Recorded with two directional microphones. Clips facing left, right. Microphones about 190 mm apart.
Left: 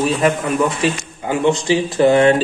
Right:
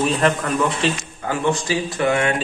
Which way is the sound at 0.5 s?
20° left (ahead or behind).